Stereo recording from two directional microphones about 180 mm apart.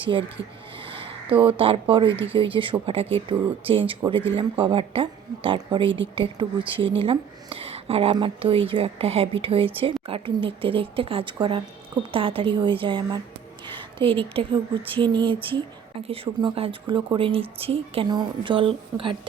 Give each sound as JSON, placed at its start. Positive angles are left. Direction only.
{"t": 0.0, "sound": "speech", "side_deg": -30}